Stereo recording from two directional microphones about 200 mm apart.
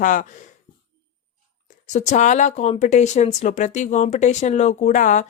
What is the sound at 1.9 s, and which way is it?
Speech, 35° left (ahead or behind).